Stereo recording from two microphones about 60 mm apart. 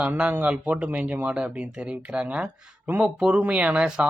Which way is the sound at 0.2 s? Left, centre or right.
Right.